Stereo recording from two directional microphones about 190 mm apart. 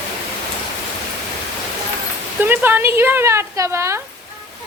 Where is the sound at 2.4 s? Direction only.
10° right (ahead or behind).